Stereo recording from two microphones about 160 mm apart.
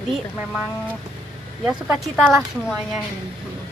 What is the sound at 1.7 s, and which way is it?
Speech, centre (ahead or behind).